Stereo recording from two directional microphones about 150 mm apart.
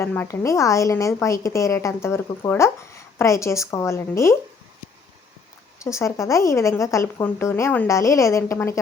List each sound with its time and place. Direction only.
0.0 s speech: 15° left (ahead or behind)
5.8 s speech: 20° left (ahead or behind)